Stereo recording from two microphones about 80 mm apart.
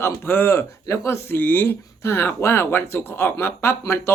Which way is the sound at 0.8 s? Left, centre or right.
Left.